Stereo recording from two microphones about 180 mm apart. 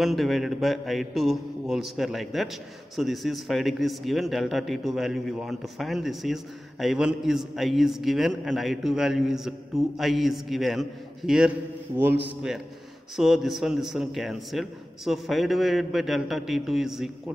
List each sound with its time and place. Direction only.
0.0 s a man's voice: centre (ahead or behind)